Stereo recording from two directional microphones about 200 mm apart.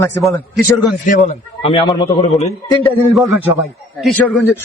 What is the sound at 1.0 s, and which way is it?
A man's voice, 40° left (ahead or behind).